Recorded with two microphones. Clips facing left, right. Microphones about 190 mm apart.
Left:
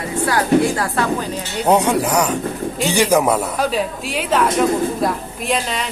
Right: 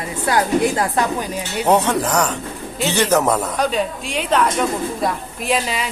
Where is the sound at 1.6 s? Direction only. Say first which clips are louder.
Left 1 dB; 10° left (ahead or behind).